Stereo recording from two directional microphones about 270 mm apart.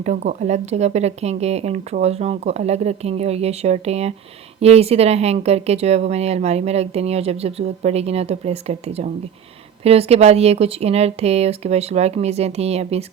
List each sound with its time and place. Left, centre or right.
0.0 s speech: right